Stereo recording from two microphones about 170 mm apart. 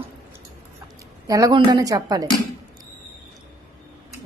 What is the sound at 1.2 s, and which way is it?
A woman's voice, 20° right (ahead or behind).